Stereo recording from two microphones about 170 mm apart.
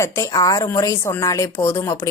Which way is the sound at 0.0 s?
20° left (ahead or behind).